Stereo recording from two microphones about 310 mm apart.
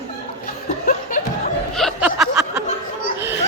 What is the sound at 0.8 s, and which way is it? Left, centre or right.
Laughter, left.